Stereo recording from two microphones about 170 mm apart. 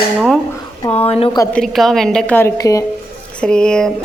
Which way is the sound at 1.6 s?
Centre (ahead or behind).